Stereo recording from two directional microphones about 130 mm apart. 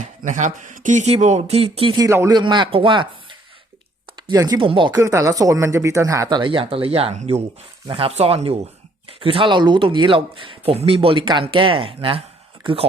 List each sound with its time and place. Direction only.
0.0 s speech: 70° right (ahead or behind); by 2.0 s 45° right (ahead or behind)
2.0 s speech: 20° right (ahead or behind)
2.3 s speech: 35° right (ahead or behind)
4.6 s speech: 40° right (ahead or behind)
4.9 s speech: 25° right (ahead or behind); by 12.8 s 40° right (ahead or behind)